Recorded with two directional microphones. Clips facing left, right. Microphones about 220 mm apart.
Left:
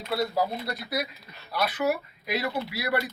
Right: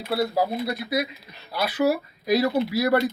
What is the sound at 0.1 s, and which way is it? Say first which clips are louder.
Speech: right 3 dB; 30° right (ahead or behind).